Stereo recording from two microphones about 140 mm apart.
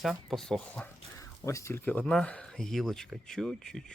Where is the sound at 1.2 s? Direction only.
20° left (ahead or behind).